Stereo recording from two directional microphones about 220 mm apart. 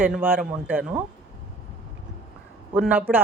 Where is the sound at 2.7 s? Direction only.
5° right (ahead or behind).